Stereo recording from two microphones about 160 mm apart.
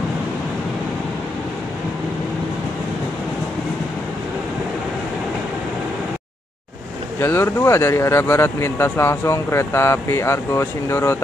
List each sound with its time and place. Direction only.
7.2 s speech: 15° left (ahead or behind)